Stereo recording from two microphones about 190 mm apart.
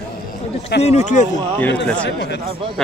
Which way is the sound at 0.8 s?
40° left (ahead or behind).